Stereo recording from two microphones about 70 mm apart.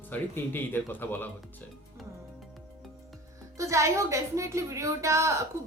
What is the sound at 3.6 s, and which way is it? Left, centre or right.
A woman's voice, right.